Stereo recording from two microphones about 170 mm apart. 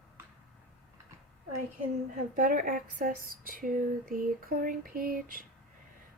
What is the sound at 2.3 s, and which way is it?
Speech, 50° right (ahead or behind).